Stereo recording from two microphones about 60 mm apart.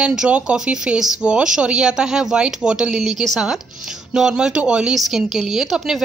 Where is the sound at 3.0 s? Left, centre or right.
Centre.